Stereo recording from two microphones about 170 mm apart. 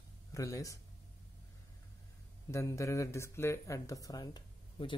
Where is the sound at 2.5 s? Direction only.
15° left (ahead or behind).